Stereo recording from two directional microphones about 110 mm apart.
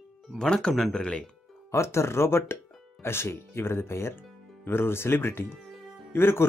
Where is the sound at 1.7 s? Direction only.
25° left (ahead or behind).